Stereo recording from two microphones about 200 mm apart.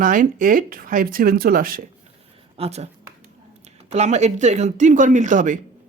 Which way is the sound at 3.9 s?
35° right (ahead or behind).